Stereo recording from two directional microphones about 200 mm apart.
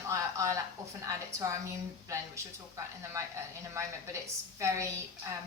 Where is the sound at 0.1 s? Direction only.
15° right (ahead or behind).